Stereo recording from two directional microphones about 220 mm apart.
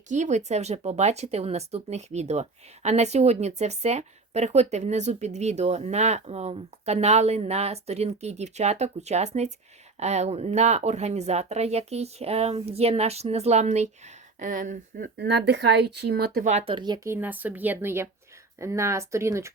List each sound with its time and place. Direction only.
0.1 s speech: 35° right (ahead or behind); by 19.5 s 15° right (ahead or behind)